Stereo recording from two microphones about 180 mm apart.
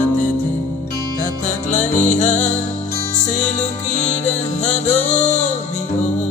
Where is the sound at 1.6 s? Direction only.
45° left (ahead or behind).